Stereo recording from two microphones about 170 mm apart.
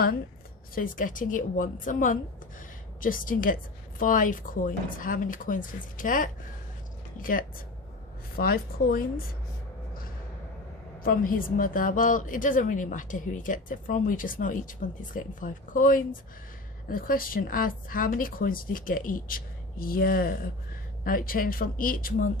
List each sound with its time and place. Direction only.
0.8 s a woman's voice: 55° left (ahead or behind)
11.0 s a woman's voice: 55° left (ahead or behind)